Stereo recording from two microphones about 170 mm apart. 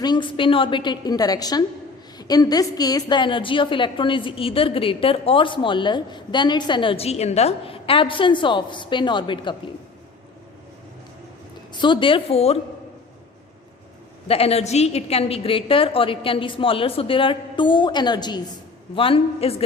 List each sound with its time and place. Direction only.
0.0 s a woman's voice: 25° left (ahead or behind)
11.7 s a woman's voice: 30° left (ahead or behind)
14.3 s a woman's voice: 35° left (ahead or behind)